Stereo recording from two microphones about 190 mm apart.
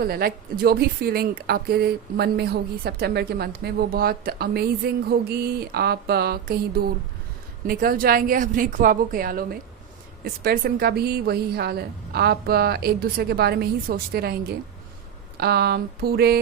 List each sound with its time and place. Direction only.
0.0 s a woman's voice: 50° right (ahead or behind)